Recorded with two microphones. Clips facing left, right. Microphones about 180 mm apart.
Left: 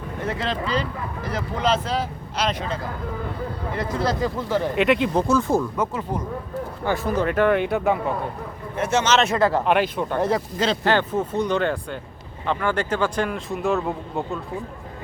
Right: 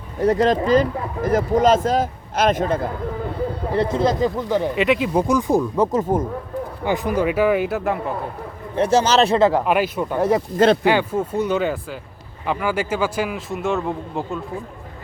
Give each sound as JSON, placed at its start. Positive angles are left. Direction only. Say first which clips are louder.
{"t": 0.2, "sound": "speech", "louder": "right 10 dB", "side_deg": -40}
{"t": 3.7, "sound": "speech", "louder": "right 5 dB", "side_deg": -25}
{"t": 4.7, "sound": "speech", "louder": "left 1 dB", "side_deg": 0}
{"t": 5.3, "sound": "a man's voice", "louder": "right 3 dB", "side_deg": -15}
{"t": 5.7, "sound": "a man's voice", "louder": "right 7 dB", "side_deg": -35}
{"t": 6.8, "sound": "a man's voice", "louder": "right 2 dB", "side_deg": -15}
{"t": 8.7, "sound": "a man's voice", "louder": "right 4 dB", "side_deg": -35}
{"t": 9.4, "sound": "a man's voice", "louder": "right 2 dB", "side_deg": -10}